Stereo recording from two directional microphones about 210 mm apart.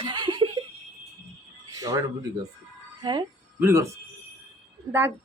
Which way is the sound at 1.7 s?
15° right (ahead or behind).